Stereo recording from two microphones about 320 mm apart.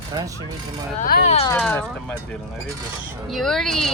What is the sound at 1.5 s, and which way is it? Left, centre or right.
Speech, centre.